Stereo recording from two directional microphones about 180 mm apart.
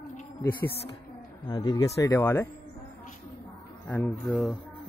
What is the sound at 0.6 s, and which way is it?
Speech, 60° left (ahead or behind).